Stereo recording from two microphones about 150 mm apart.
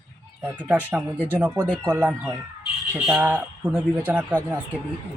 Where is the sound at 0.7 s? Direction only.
10° right (ahead or behind).